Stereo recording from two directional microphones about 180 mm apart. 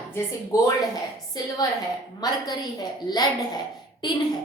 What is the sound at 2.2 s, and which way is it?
Speech, 20° left (ahead or behind).